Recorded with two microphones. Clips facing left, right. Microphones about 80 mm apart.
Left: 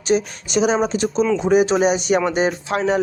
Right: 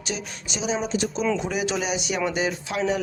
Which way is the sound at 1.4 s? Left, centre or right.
Left.